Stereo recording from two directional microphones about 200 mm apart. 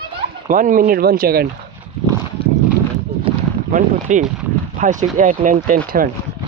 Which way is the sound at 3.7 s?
40° right (ahead or behind).